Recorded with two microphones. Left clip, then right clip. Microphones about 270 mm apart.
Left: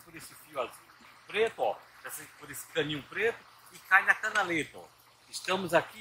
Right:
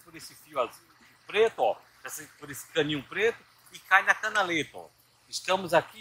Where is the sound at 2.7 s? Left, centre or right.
Right.